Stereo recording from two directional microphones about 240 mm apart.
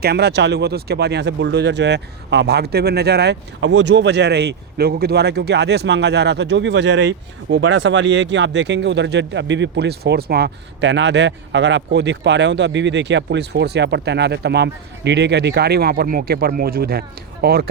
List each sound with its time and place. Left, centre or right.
0.0 s speech: right